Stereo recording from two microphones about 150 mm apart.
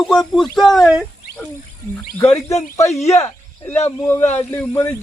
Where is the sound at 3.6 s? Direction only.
15° left (ahead or behind).